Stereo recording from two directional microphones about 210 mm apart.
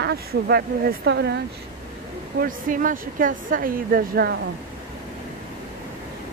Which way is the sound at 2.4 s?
40° right (ahead or behind).